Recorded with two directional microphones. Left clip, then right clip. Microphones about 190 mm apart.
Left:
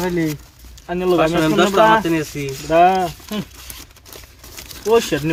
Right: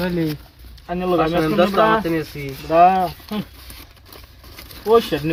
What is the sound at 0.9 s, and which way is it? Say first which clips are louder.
Speech: left 3 dB; 20° left (ahead or behind).